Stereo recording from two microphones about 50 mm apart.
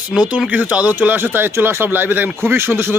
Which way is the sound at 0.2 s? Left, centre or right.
Right.